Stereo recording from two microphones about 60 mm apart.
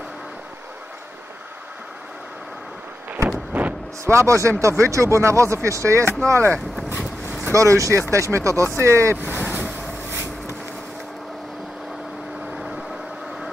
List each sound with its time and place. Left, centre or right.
3.3 s a sound: right
4.0 s speech: right
6.9 s vehicle: right
7.5 s speech: right
9.2 s boat: right
10.1 s a sound: right